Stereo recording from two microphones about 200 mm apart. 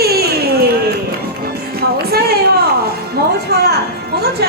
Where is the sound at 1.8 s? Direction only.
50° right (ahead or behind).